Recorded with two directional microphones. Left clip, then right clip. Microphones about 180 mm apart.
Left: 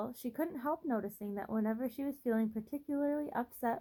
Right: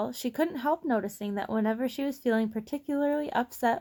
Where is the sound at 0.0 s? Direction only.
40° right (ahead or behind).